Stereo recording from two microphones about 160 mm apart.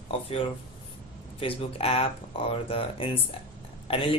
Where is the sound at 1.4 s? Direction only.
35° left (ahead or behind).